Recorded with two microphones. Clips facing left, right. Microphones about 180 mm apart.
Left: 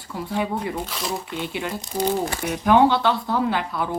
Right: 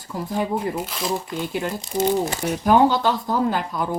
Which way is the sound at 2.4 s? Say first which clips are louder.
Left 1 dB; 40° right (ahead or behind).